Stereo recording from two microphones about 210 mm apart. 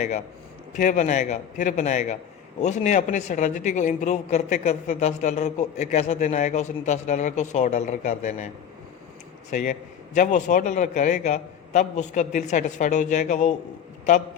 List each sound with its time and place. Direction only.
0.7 s speech: 35° left (ahead or behind)
9.5 s speech: 35° left (ahead or behind)